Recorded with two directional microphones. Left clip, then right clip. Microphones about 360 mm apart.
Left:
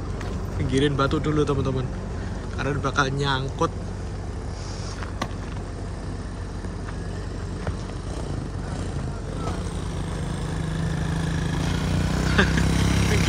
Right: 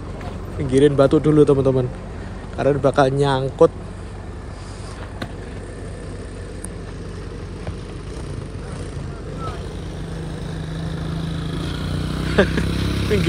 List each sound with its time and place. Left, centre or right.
0.7 s speech: centre
10.9 s vehicle: left